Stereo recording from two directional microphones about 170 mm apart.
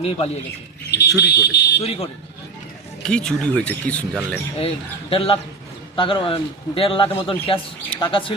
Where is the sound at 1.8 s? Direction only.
35° left (ahead or behind).